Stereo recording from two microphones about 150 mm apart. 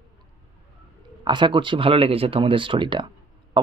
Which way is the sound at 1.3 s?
35° right (ahead or behind).